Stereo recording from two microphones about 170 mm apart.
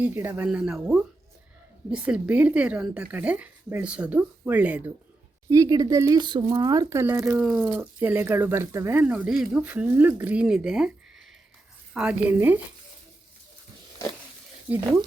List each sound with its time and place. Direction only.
0.0 s speech: 10° right (ahead or behind)
5.5 s speech: 20° right (ahead or behind)
7.3 s speech: 5° right (ahead or behind)
11.9 s speech: 10° right (ahead or behind)
14.7 s speech: 10° right (ahead or behind)